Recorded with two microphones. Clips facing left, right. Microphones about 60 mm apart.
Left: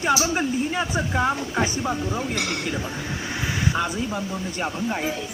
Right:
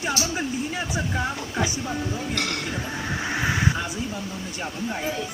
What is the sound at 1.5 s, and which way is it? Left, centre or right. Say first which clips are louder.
Speech: left 3 dB; left.